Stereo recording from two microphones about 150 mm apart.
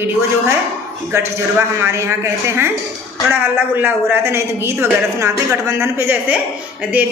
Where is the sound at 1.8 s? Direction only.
20° right (ahead or behind).